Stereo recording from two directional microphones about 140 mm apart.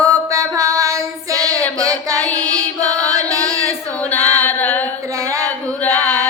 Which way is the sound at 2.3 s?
25° right (ahead or behind).